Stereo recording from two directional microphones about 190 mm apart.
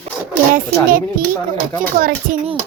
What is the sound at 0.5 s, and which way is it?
Speech, 50° right (ahead or behind).